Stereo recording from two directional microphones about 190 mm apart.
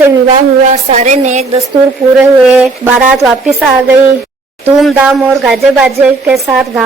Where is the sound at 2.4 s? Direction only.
5° right (ahead or behind).